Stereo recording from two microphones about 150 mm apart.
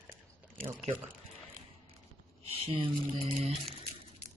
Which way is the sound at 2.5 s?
35° right (ahead or behind).